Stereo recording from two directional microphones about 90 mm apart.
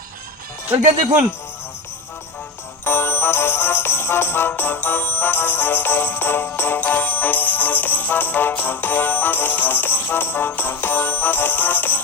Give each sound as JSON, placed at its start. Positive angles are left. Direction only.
{"t": 2.8, "sound": "music", "side_deg": 25}